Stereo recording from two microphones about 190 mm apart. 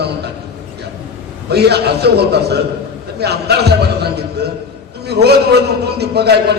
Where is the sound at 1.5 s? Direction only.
60° right (ahead or behind).